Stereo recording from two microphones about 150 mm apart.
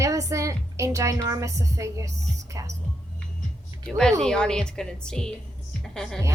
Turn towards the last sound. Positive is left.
turn(degrees=5)  # may be behind; listen again after turning